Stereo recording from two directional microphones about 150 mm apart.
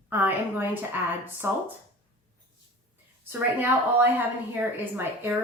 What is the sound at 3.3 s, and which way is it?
Speech, 15° right (ahead or behind).